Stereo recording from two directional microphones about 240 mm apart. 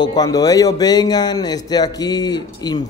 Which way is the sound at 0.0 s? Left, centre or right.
Centre.